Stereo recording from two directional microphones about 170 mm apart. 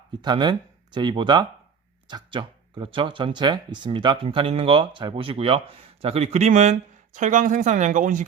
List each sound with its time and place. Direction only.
0.2 s speech: 25° right (ahead or behind); by 8.2 s 50° right (ahead or behind)